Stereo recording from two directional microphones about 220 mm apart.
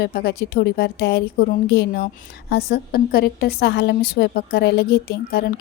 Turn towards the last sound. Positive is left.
turn(degrees=45)  # may be behind; listen again after turning